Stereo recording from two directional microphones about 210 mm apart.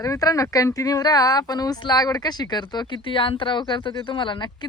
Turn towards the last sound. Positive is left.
turn(degrees=20)  # may be behind; listen again after turning